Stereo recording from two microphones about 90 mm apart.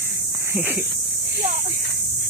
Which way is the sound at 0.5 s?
20° right (ahead or behind).